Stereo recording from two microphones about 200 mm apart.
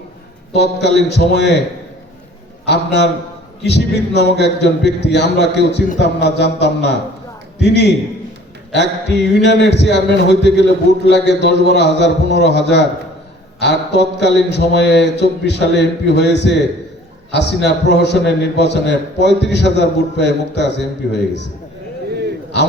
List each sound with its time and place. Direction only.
0.5 s speech: 60° left (ahead or behind)
2.6 s speech: 60° left (ahead or behind)